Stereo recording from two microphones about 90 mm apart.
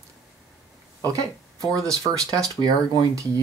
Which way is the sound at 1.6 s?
40° right (ahead or behind).